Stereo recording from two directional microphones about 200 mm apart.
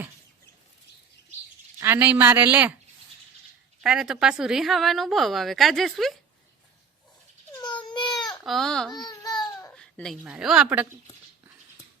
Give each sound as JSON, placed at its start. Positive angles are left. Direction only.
{"t": 1.8, "sound": "speech", "side_deg": -10}
{"t": 3.8, "sound": "a woman's voice", "side_deg": -5}
{"t": 7.6, "sound": "baby cry", "side_deg": 20}
{"t": 8.4, "sound": "a woman's voice", "side_deg": 0}
{"t": 9.0, "sound": "babbling", "side_deg": 20}
{"t": 9.7, "sound": "speech", "side_deg": 5}